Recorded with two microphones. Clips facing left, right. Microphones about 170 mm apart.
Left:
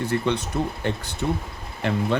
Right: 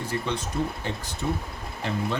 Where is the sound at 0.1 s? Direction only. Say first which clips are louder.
Left 5 dB; 65° left (ahead or behind).